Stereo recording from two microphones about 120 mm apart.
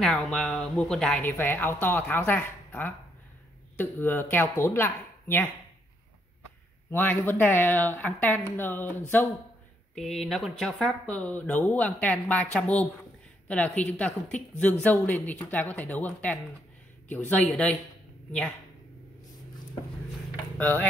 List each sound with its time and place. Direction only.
0.0 s speech: 5° left (ahead or behind)
1.3 s a woman's voice: 15° left (ahead or behind)
6.9 s a woman's voice: 15° left (ahead or behind)
9.9 s speech: centre (ahead or behind)
11.1 s a woman's voice: 10° left (ahead or behind)
17.5 s speech: 5° left (ahead or behind)
20.5 s speech: 15° left (ahead or behind)